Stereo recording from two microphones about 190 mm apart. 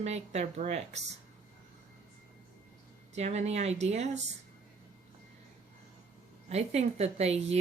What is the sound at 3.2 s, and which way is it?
A woman's voice, 35° right (ahead or behind).